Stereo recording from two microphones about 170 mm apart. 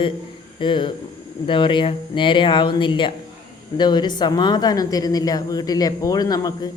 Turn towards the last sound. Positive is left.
turn(degrees=20)  # may be behind; listen again after turning